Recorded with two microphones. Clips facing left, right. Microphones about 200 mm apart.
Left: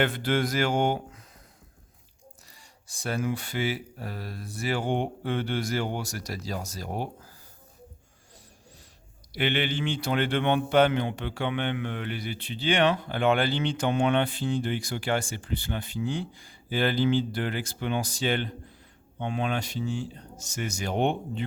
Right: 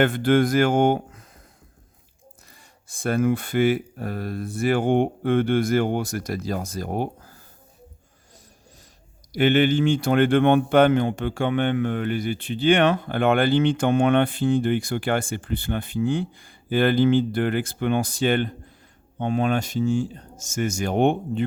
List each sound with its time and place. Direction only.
0.0 s speech: 50° right (ahead or behind)
2.5 s speech: 55° right (ahead or behind)
9.3 s speech: 45° right (ahead or behind)